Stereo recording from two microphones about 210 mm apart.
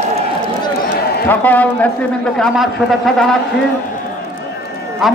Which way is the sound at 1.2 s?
10° left (ahead or behind).